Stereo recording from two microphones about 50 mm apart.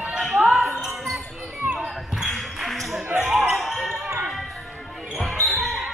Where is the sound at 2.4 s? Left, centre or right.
Centre.